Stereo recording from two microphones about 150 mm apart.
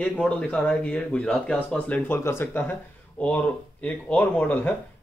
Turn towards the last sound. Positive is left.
turn(degrees=10)  # may be behind; listen again after turning